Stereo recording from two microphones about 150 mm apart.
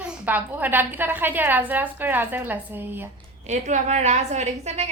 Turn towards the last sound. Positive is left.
turn(degrees=-50)  # may be behind; listen again after turning